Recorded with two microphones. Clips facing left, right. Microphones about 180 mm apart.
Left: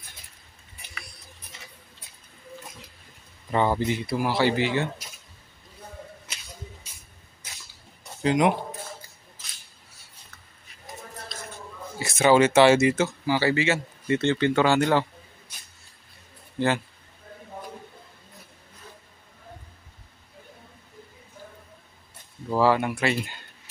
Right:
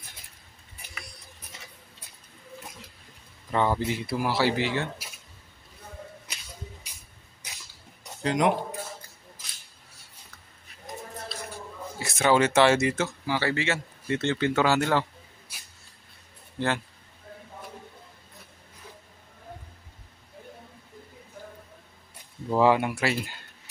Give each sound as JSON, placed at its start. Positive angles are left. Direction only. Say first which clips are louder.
{"t": 3.5, "sound": "speech", "louder": "left 2 dB", "side_deg": 10}
{"t": 3.8, "sound": "speech", "louder": "left 2 dB", "side_deg": -5}
{"t": 7.4, "sound": "cough", "louder": "right 1 dB", "side_deg": -15}
{"t": 8.2, "sound": "speech", "louder": "left 2 dB", "side_deg": 5}
{"t": 12.0, "sound": "a man's voice", "louder": "left 4 dB", "side_deg": 0}
{"t": 22.6, "sound": "speech", "louder": "even", "side_deg": -10}